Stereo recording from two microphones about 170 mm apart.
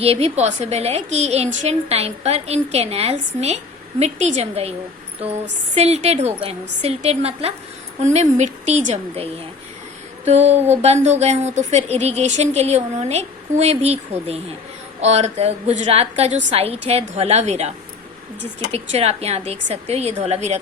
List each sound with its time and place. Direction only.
0.0 s a woman's voice: 35° right (ahead or behind)
5.7 s a woman's voice: 40° right (ahead or behind)